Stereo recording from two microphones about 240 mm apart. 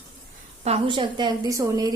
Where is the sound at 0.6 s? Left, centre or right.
Right.